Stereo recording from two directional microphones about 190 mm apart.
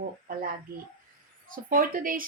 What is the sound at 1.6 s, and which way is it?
Speech, 45° right (ahead or behind).